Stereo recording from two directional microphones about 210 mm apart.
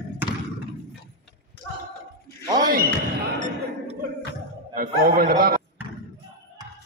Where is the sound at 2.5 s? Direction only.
45° right (ahead or behind).